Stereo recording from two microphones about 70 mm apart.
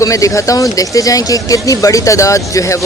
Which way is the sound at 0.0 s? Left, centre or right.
Left.